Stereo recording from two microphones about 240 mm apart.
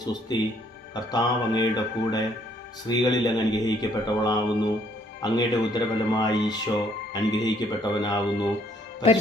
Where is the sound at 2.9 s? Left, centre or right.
Centre.